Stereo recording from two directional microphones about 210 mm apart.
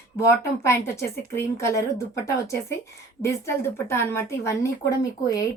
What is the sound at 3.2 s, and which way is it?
Speech, 10° left (ahead or behind).